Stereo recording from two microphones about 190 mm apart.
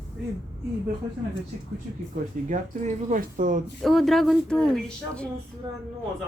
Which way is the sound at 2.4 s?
40° right (ahead or behind).